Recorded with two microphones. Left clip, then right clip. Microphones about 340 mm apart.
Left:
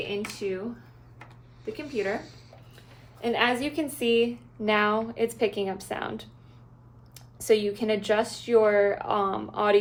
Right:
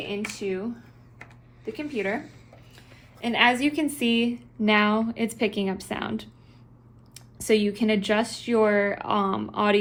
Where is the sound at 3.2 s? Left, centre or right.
Centre.